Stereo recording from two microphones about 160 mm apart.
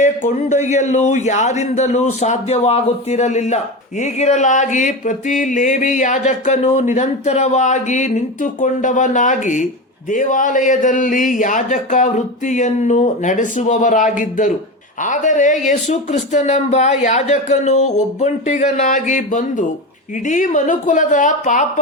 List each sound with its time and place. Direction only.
0.0 s speech: 50° left (ahead or behind)